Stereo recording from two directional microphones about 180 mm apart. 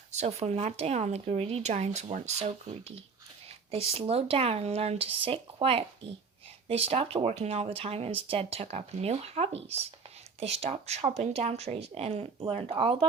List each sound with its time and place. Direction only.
0.1 s speech: 40° right (ahead or behind)